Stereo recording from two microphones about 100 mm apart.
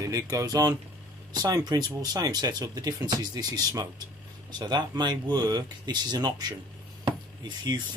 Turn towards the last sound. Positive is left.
turn(degrees=-45)  # may be behind; listen again after turning